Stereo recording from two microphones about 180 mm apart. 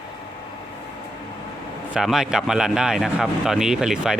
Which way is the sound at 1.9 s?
Centre (ahead or behind).